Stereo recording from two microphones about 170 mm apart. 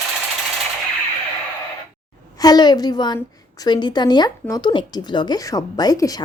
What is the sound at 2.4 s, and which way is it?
A woman's voice, 25° left (ahead or behind).